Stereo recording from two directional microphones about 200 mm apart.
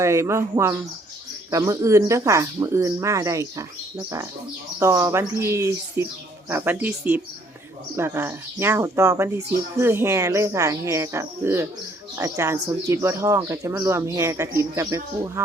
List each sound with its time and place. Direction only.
0.0 s speech: 15° right (ahead or behind)